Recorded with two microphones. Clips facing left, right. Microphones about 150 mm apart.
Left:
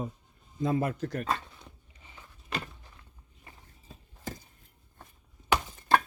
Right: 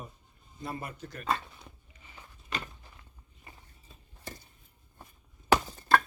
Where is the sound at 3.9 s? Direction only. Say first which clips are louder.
Left 7 dB; 90° left.